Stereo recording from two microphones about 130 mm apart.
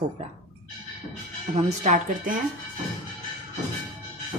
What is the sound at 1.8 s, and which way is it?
Speech, 75° right (ahead or behind).